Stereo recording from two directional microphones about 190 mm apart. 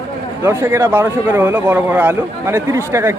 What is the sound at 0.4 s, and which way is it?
Speech, 15° right (ahead or behind).